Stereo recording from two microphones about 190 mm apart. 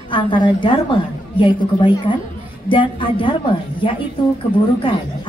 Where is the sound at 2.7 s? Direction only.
25° left (ahead or behind).